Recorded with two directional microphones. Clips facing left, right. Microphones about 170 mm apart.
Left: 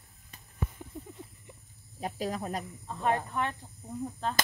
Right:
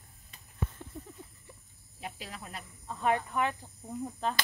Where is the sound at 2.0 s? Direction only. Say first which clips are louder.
Left 10 dB; 40° left (ahead or behind).